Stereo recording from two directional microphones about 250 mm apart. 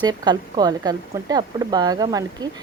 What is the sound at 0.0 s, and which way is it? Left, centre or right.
A woman's voice, centre.